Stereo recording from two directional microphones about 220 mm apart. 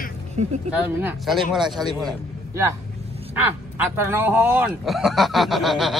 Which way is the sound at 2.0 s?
15° right (ahead or behind).